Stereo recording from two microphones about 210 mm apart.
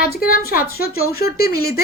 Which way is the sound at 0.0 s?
45° left (ahead or behind).